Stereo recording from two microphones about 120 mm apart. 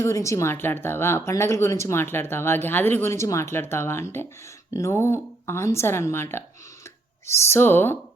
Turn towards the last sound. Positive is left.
turn(degrees=20)  # may be behind; listen again after turning